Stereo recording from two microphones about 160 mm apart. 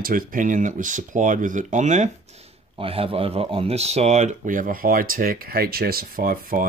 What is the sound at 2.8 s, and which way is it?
Speech, 35° right (ahead or behind).